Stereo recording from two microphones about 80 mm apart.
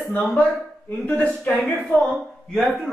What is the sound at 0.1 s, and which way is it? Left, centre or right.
Speech, centre.